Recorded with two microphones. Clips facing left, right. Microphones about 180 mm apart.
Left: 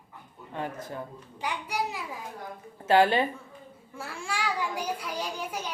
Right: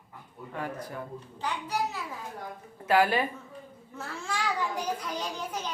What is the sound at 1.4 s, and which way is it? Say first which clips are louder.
Speech: even; 10° left (ahead or behind).